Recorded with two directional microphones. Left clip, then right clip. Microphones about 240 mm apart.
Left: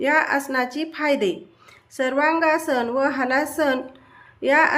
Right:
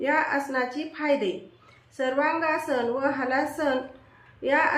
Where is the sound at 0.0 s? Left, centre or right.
Left.